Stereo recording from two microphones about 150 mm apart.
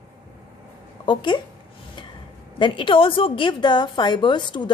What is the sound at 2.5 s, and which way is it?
A woman's voice, 35° left (ahead or behind).